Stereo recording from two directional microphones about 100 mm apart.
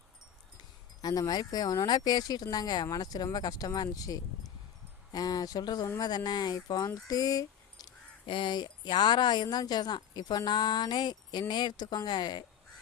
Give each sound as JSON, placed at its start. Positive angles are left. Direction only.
{"t": 1.0, "sound": "speech", "side_deg": 40}
{"t": 8.3, "sound": "speech", "side_deg": 50}